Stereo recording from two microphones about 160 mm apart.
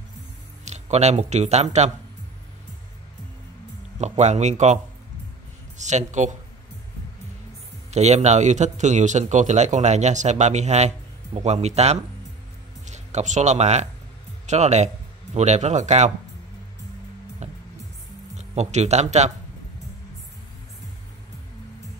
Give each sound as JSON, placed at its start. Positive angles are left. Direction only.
{"t": 0.7, "sound": "speech", "side_deg": -45}
{"t": 4.2, "sound": "a man's voice", "side_deg": -45}
{"t": 5.8, "sound": "a man's voice", "side_deg": -45}
{"t": 7.9, "sound": "a man's voice", "side_deg": -45}
{"t": 17.4, "sound": "music", "side_deg": -45}
{"t": 18.3, "sound": "speech", "side_deg": -45}